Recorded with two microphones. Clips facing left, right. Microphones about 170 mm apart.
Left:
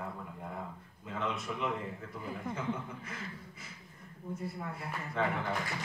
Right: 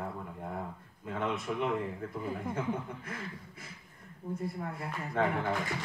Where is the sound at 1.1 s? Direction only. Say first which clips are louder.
Right 3 dB; 50° right (ahead or behind).